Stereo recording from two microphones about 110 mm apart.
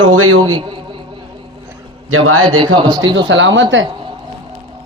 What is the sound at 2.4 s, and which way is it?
Speech, 45° right (ahead or behind).